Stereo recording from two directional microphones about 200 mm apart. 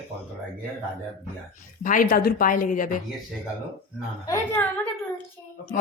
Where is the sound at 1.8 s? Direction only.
40° left (ahead or behind).